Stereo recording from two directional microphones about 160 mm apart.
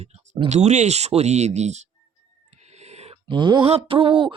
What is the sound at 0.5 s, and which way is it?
Speech, 45° right (ahead or behind).